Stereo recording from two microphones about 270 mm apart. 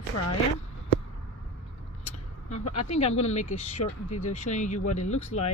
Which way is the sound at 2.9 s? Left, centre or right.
Left.